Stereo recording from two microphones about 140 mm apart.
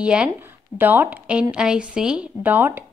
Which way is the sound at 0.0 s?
10° right (ahead or behind).